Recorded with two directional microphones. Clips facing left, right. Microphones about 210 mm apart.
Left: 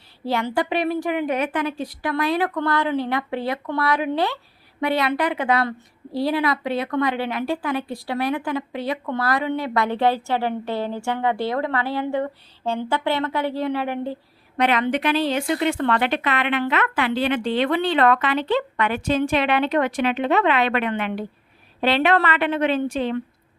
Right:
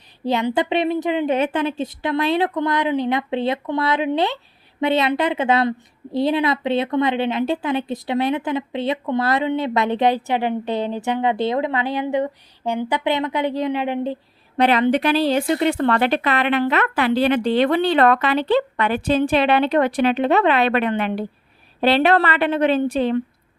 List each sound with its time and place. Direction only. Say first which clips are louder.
0.3 s a woman's voice: right 3 dB; 20° right (ahead or behind)
14.6 s a woman's voice: right 4 dB; 35° right (ahead or behind)